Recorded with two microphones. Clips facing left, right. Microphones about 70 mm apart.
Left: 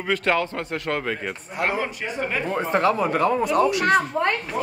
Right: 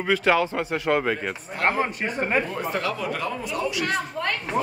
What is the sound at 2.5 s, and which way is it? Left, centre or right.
Speech, left.